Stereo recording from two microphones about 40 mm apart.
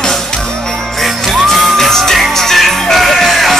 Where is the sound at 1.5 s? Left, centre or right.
Centre.